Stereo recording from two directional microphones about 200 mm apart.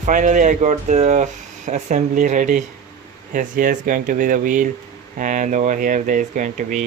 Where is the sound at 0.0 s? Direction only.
40° right (ahead or behind).